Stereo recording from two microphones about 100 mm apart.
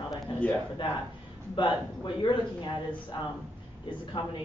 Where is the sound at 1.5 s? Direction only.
50° left (ahead or behind).